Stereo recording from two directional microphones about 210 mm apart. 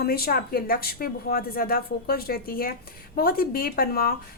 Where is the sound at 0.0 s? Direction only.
45° left (ahead or behind).